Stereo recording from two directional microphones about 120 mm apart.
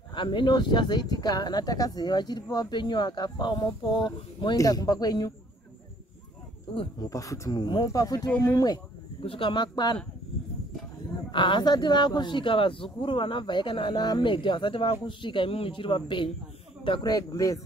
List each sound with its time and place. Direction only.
0.1 s speech: 40° left (ahead or behind)
7.0 s speech: 30° left (ahead or behind)
9.2 s speech: 45° left (ahead or behind)
11.3 s speech: 40° left (ahead or behind)
17.0 s speech: 30° left (ahead or behind)